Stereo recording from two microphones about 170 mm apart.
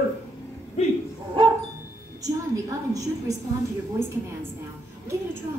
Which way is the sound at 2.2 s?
20° right (ahead or behind).